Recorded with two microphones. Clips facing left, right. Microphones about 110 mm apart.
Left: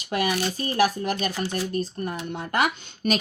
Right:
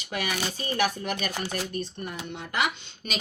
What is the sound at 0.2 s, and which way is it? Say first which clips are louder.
Speech: left 5 dB; 40° left (ahead or behind).